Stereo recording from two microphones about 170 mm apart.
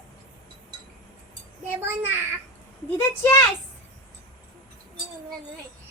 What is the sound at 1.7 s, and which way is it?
Speech, 15° right (ahead or behind).